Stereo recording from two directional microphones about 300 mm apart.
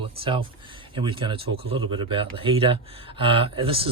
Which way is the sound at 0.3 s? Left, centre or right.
Centre.